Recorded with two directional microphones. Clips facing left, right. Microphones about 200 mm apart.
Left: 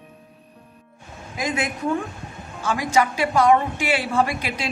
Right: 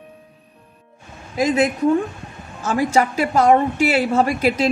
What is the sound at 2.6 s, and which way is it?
A woman's voice, 40° right (ahead or behind).